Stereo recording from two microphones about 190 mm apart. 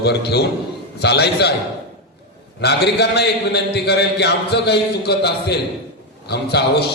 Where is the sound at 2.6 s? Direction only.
60° left (ahead or behind).